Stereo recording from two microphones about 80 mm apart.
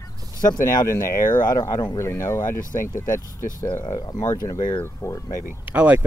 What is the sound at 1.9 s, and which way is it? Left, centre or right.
Speech, left.